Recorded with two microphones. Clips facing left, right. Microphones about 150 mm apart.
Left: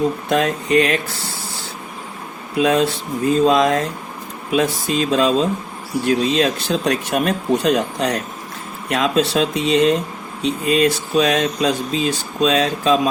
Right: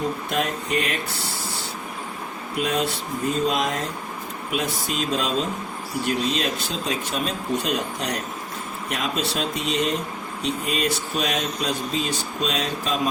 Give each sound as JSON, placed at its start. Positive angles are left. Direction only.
{"t": 0.3, "sound": "speech", "side_deg": 90}
{"t": 2.6, "sound": "speech", "side_deg": 90}